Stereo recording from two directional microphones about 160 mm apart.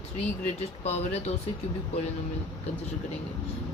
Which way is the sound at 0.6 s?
40° left (ahead or behind).